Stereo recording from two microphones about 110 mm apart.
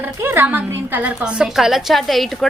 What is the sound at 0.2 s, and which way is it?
A woman's voice, 20° right (ahead or behind).